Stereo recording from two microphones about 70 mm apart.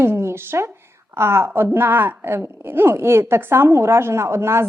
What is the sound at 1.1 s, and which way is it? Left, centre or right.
A woman's voice, right.